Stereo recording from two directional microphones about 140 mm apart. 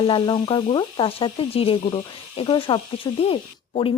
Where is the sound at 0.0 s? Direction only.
35° left (ahead or behind).